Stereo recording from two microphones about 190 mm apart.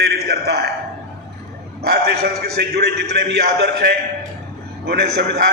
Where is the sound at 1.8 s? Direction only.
55° right (ahead or behind).